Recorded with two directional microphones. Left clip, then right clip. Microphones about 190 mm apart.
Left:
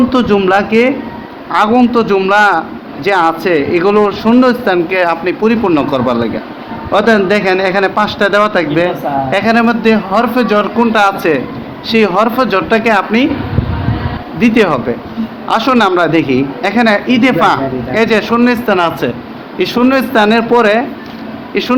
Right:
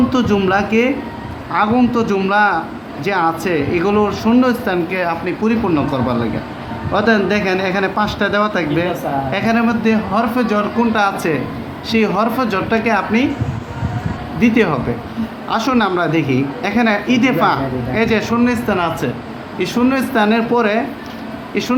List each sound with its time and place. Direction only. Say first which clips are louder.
0.3 s a man's voice: left 5 dB; 20° left (ahead or behind); by 6.2 s 35° left (ahead or behind)
6.9 s a man's voice: left 5 dB; 25° left (ahead or behind)
14.3 s a man's voice: left 5 dB; 30° left (ahead or behind)